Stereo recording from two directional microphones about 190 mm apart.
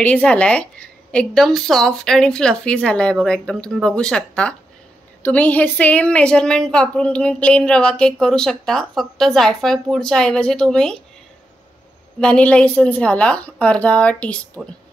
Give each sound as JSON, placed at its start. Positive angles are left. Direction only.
{"t": 0.0, "sound": "a woman's voice", "side_deg": 5}
{"t": 12.2, "sound": "a woman's voice", "side_deg": 5}